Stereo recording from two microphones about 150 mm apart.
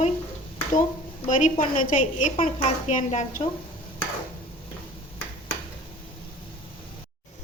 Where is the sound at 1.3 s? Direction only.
60° left (ahead or behind).